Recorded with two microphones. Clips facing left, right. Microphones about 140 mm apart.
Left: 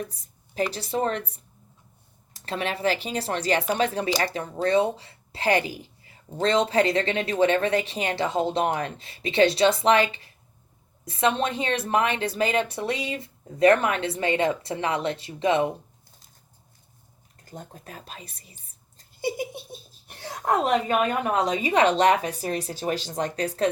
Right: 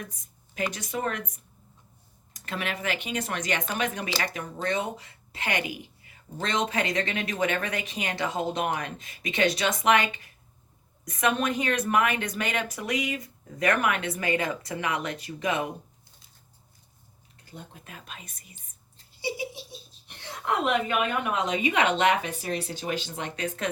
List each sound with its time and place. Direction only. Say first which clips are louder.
0.0 s speech: left 6 dB; 35° left (ahead or behind)
17.4 s speech: left 4 dB; 45° left (ahead or behind)
18.5 s speech: even; 45° left (ahead or behind)